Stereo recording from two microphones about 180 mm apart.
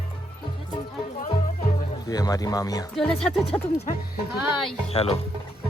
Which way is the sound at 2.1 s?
20° left (ahead or behind).